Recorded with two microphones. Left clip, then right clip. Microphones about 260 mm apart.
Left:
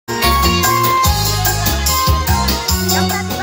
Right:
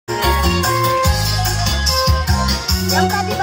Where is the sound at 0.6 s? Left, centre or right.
Left.